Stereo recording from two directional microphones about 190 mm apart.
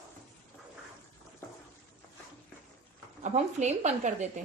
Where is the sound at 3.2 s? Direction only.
35° right (ahead or behind).